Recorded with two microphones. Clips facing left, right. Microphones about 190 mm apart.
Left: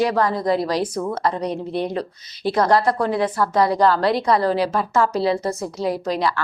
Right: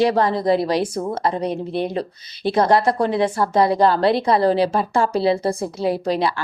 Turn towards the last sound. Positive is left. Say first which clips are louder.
# right 1 dB
turn(degrees=-25)  # may be behind; listen again after turning